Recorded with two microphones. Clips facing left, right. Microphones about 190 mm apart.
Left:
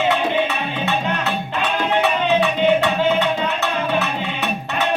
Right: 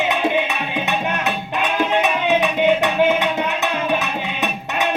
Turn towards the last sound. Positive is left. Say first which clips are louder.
# even
turn(degrees=-15)  # may be behind; listen again after turning